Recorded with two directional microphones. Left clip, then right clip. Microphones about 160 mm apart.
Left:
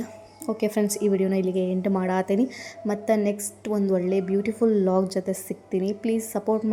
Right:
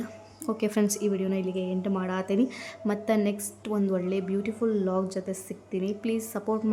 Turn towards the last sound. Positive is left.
turn(degrees=20)  # may be behind; listen again after turning